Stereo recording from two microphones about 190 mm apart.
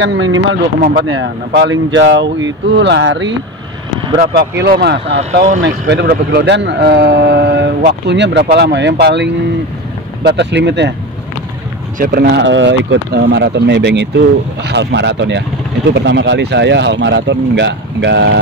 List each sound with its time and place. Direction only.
0.0 s a man's voice: 75° right (ahead or behind)
4.3 s a man's voice: 55° right (ahead or behind)
5.1 s speech: 40° right (ahead or behind)
5.6 s a man's voice: 65° right (ahead or behind)
12.0 s a man's voice: 60° right (ahead or behind)